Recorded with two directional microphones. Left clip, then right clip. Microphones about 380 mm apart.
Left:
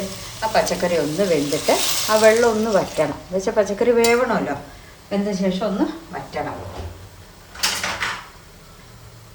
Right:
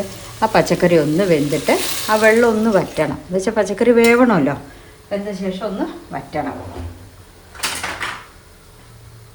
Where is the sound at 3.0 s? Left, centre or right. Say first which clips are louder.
Right 2 dB; centre.